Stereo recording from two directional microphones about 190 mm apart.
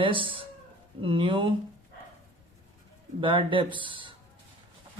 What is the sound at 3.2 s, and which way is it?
Speech, 25° right (ahead or behind).